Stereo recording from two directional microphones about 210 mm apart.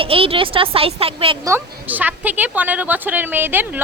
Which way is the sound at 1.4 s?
10° right (ahead or behind).